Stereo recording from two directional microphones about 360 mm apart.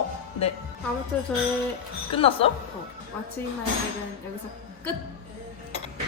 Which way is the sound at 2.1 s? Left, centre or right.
Centre.